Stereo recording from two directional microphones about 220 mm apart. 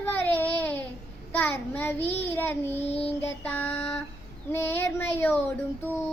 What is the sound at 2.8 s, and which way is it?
Child singing, 25° left (ahead or behind).